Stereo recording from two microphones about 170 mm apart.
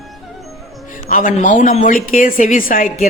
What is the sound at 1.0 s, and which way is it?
A man's voice, 50° left (ahead or behind).